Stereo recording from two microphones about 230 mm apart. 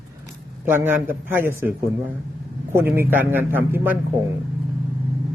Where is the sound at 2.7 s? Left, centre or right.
Centre.